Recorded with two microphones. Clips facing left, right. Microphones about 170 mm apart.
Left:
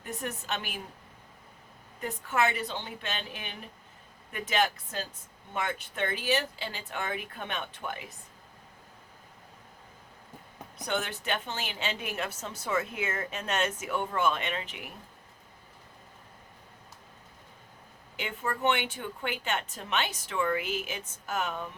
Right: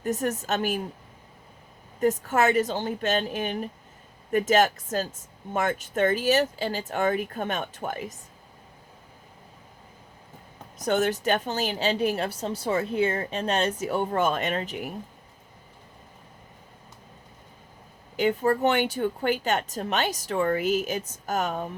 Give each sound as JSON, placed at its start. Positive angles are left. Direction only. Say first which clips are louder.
{"t": 0.0, "sound": "speech", "louder": "right 10 dB", "side_deg": -45}
{"t": 2.0, "sound": "speech", "louder": "right 7 dB", "side_deg": -40}
{"t": 10.8, "sound": "a woman's voice", "louder": "right 9 dB", "side_deg": -40}
{"t": 18.2, "sound": "a woman's voice", "louder": "right 10 dB", "side_deg": -40}